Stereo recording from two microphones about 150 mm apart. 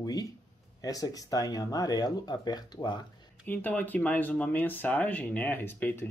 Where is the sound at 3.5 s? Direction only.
10° left (ahead or behind).